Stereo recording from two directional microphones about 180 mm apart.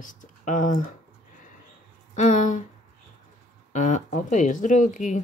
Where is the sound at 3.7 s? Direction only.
40° left (ahead or behind).